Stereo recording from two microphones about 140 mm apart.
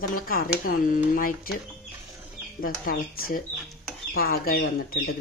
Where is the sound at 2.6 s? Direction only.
90° left.